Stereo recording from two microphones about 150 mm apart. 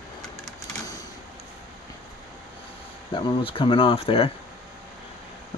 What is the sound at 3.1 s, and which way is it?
Speech, 35° left (ahead or behind).